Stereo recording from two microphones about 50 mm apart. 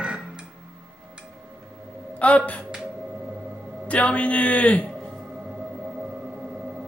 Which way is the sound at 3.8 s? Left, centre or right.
Left.